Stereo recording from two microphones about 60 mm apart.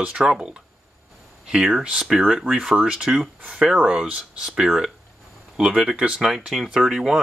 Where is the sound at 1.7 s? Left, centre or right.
Centre.